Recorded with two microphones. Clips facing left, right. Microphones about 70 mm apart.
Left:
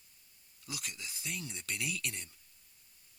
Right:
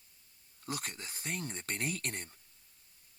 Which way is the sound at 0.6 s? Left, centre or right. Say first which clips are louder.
Right 4 dB; right.